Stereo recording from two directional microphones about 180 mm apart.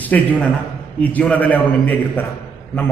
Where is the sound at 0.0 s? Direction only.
10° left (ahead or behind).